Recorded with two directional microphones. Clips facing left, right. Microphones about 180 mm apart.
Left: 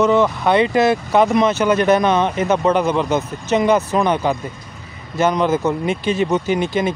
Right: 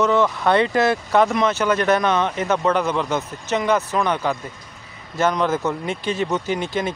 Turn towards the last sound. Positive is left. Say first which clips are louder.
# left 5 dB
turn(degrees=15)  # may be behind; listen again after turning